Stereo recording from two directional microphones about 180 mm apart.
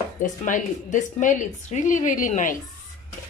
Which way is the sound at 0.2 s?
45° left (ahead or behind).